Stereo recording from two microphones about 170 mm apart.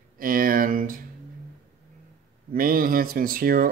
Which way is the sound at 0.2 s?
55° right (ahead or behind).